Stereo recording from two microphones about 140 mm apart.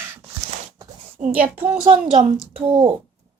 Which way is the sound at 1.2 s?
65° right (ahead or behind).